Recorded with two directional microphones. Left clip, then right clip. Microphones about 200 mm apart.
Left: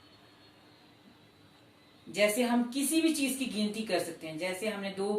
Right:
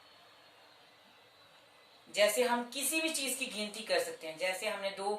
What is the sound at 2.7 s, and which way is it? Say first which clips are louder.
A woman's voice: left 5 dB; 20° right (ahead or behind).